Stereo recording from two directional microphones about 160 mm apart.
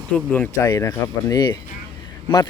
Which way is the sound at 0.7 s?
20° left (ahead or behind).